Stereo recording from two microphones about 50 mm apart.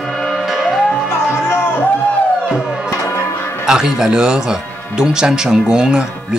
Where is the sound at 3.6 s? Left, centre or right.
Centre.